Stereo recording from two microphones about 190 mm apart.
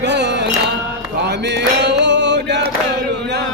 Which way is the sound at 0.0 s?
65° right (ahead or behind).